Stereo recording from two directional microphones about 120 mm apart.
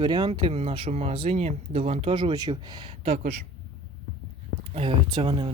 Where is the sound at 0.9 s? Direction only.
65° right (ahead or behind).